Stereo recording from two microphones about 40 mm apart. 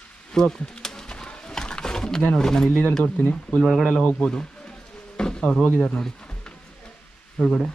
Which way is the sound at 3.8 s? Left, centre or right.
Left.